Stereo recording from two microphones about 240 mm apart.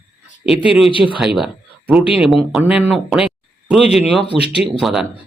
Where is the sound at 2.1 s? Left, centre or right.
Centre.